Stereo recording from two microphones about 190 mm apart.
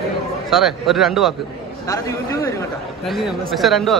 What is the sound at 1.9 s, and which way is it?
Speech, 15° left (ahead or behind).